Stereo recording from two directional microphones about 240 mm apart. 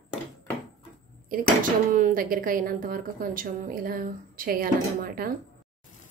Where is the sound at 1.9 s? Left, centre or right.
Right.